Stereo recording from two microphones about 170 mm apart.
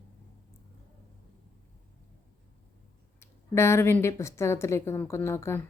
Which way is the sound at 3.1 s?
15° left (ahead or behind).